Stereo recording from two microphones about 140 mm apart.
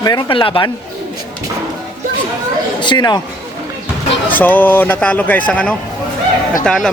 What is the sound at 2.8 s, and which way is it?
Speech, 30° left (ahead or behind).